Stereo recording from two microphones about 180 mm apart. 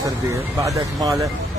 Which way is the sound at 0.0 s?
15° right (ahead or behind).